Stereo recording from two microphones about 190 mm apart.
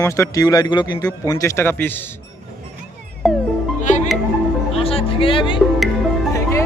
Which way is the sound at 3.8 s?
40° left (ahead or behind).